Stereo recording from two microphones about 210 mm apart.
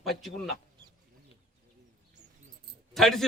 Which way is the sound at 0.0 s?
Centre (ahead or behind).